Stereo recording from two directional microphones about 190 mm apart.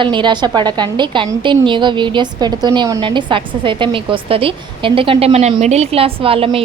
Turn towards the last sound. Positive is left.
turn(degrees=-30)  # may be behind; listen again after turning